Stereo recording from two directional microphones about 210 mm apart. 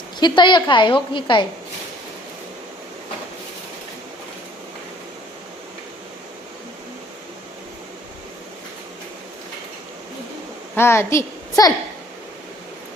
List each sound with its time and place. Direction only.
0.2 s a woman's voice: 20° left (ahead or behind)
10.8 s a woman's voice: 10° left (ahead or behind)